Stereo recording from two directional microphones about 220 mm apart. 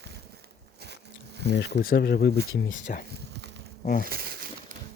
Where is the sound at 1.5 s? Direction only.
50° left (ahead or behind).